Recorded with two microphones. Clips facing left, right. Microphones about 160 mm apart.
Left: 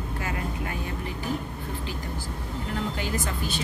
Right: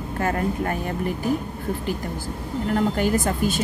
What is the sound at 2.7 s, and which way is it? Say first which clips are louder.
Speech: right 9 dB; 50° right (ahead or behind).